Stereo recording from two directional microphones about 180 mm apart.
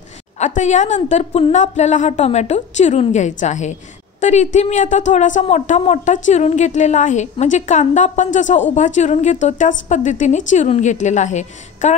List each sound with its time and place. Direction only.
0.4 s a woman's voice: 40° left (ahead or behind)